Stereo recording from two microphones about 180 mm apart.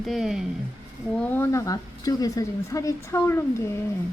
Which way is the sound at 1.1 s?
10° left (ahead or behind).